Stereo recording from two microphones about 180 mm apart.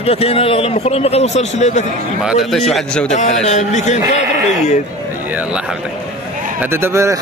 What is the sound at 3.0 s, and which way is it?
Speech, 40° left (ahead or behind).